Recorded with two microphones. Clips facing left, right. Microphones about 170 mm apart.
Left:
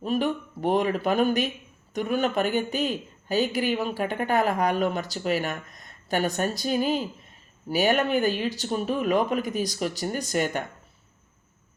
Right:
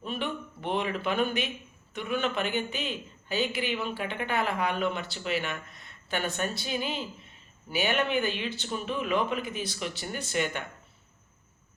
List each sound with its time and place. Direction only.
0.0 s speech: 40° left (ahead or behind)